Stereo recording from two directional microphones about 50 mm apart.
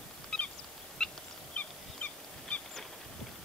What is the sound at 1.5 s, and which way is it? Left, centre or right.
Goose, left.